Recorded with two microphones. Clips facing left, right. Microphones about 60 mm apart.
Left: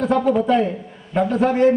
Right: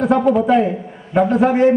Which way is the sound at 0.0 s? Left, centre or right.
Centre.